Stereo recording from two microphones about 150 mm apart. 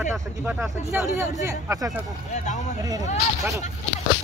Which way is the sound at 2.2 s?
50° left (ahead or behind).